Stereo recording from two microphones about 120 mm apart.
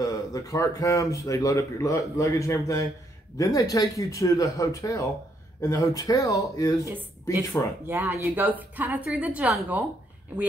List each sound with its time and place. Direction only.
0.0 s speech: 30° left (ahead or behind)
7.8 s a woman's voice: 20° right (ahead or behind)